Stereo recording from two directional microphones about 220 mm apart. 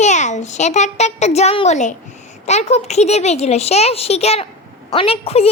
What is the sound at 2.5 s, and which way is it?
A child's voice, 30° left (ahead or behind).